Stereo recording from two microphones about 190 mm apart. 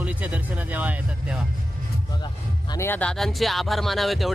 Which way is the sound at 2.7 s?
15° left (ahead or behind).